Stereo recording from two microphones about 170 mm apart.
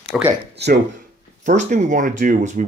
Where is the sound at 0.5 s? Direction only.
75° right (ahead or behind).